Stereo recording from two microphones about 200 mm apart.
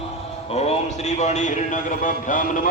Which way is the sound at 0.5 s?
35° left (ahead or behind).